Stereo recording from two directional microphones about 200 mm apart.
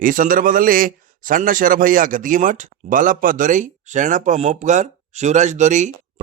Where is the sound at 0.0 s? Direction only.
45° right (ahead or behind).